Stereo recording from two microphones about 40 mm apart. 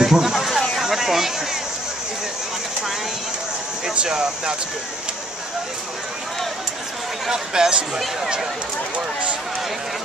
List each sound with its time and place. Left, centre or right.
0.0 s a sound: centre
3.9 s speech: centre
7.2 s speech: centre
8.9 s speech: right